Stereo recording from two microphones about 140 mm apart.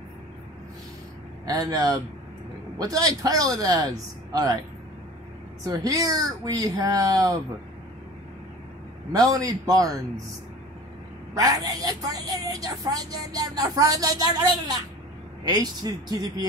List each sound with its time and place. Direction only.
1.4 s a woman's voice: 25° right (ahead or behind)
5.6 s a woman's voice: 25° right (ahead or behind)
9.1 s a woman's voice: 25° right (ahead or behind)
11.3 s a woman's voice: 25° right (ahead or behind)